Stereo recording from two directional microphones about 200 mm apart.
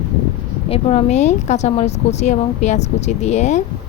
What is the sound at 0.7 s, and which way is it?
Speech, 30° left (ahead or behind).